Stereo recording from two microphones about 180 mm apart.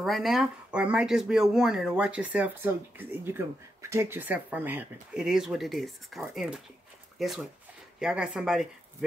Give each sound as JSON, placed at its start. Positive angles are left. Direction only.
{"t": 0.0, "sound": "speech", "side_deg": 0}